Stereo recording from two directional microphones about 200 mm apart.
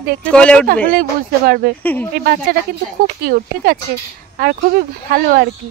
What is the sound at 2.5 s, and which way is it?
Speech, 45° right (ahead or behind).